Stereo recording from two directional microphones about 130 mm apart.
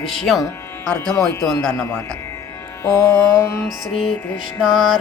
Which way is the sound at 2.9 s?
20° left (ahead or behind).